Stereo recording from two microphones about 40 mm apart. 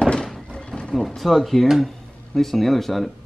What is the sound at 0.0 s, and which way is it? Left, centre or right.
Horse, centre.